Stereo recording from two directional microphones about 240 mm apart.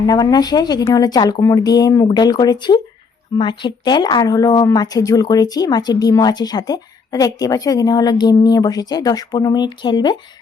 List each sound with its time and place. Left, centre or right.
0.0 s speech: centre